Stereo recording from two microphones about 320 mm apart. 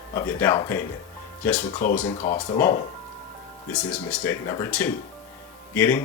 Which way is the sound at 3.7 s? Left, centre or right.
Centre.